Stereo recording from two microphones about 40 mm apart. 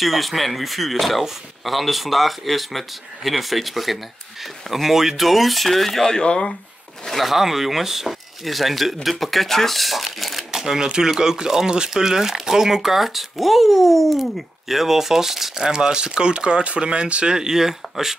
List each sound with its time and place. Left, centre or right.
0.0 s speech: centre
6.0 s speech: left
7.1 s speech: centre; by 17.4 s right
17.4 s speech: centre